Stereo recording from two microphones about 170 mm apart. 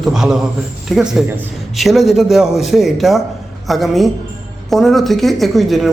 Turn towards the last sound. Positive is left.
turn(degrees=0)  # may be behind; listen again after turning